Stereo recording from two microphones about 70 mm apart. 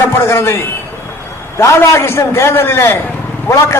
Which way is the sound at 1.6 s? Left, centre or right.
Left.